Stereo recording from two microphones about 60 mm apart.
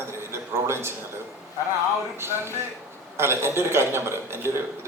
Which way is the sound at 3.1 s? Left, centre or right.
Right.